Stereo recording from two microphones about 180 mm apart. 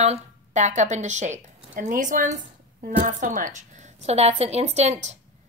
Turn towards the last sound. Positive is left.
turn(degrees=-40)  # may be behind; listen again after turning